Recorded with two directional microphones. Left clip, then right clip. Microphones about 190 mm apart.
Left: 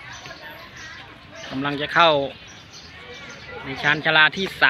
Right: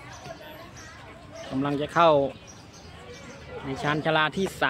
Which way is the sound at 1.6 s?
15° right (ahead or behind).